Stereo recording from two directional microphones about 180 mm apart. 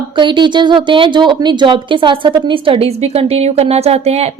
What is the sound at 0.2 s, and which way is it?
A woman's voice, 25° right (ahead or behind).